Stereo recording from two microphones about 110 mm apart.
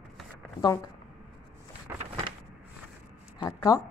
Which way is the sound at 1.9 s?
25° right (ahead or behind).